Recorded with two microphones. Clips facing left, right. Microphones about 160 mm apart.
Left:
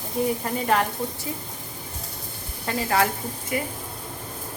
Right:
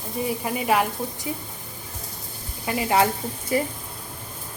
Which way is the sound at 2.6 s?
15° right (ahead or behind).